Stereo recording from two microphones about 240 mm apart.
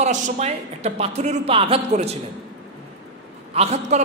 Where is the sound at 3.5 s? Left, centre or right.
Right.